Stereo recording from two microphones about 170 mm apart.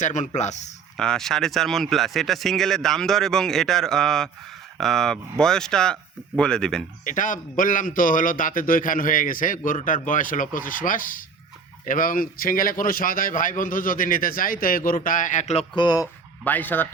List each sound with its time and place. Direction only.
0.0 s speech: 45° left (ahead or behind)
0.9 s speech: 5° left (ahead or behind)
7.0 s speech: 50° left (ahead or behind)
15.7 s speech: 25° left (ahead or behind)
16.4 s speech: 10° left (ahead or behind)